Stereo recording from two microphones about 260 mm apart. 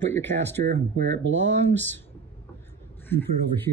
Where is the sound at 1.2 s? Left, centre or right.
Right.